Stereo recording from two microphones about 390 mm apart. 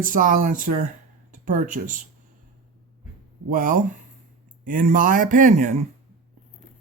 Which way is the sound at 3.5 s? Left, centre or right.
Right.